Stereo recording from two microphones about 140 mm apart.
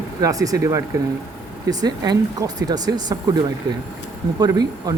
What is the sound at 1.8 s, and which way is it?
Speech, 25° right (ahead or behind).